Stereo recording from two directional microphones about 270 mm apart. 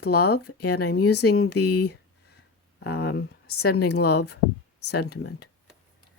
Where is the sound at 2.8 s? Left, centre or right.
Left.